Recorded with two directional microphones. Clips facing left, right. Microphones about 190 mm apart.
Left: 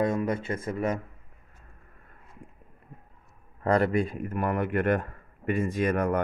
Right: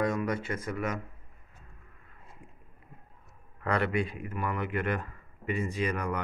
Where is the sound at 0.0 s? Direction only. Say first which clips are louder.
Left 3 dB; 25° left (ahead or behind).